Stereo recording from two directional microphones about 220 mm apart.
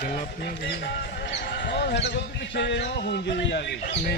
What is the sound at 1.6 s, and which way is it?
Speech, 50° left (ahead or behind).